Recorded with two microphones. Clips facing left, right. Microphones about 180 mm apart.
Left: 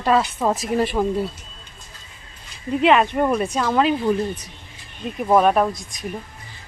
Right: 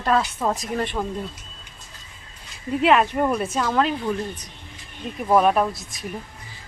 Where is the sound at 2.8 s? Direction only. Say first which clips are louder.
Left 2 dB; centre (ahead or behind).